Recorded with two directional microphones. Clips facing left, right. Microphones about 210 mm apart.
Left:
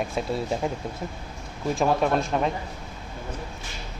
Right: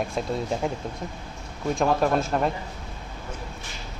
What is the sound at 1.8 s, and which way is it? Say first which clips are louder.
Speech: even; centre (ahead or behind).